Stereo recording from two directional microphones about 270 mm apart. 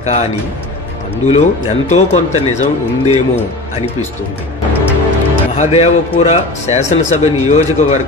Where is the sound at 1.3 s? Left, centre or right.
Left.